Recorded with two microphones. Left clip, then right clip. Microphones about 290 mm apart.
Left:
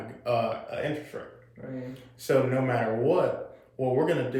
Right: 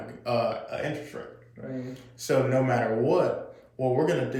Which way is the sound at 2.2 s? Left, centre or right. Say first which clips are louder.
Right 1 dB; centre.